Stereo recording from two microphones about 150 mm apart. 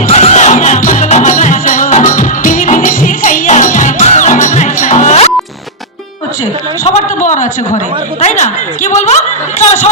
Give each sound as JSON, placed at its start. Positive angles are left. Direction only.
{"t": 0.1, "sound": "music", "side_deg": 50}
{"t": 6.8, "sound": "a sound", "side_deg": 50}
{"t": 8.2, "sound": "a woman's voice", "side_deg": 50}